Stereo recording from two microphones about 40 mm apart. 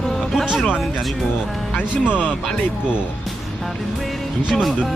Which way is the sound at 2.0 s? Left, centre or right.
Right.